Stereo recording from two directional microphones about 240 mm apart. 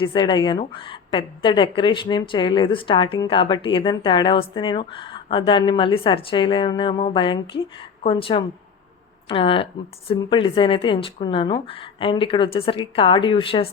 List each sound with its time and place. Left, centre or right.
0.0 s a woman's voice: centre